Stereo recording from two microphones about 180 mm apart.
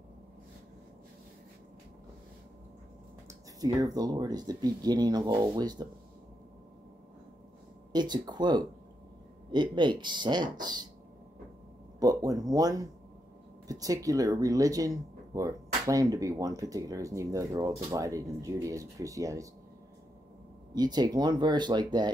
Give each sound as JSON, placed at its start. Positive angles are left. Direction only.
{"t": 3.3, "sound": "speech", "side_deg": -20}
{"t": 7.9, "sound": "speech", "side_deg": -25}
{"t": 12.0, "sound": "speech", "side_deg": -20}
{"t": 20.7, "sound": "speech", "side_deg": -20}